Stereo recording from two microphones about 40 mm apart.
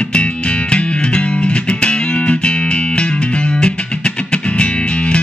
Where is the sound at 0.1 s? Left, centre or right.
Left.